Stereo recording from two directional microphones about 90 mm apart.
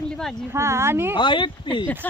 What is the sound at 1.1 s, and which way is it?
Speech, 65° left (ahead or behind).